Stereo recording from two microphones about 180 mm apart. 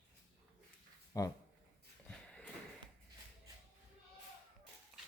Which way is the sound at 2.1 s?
5° left (ahead or behind).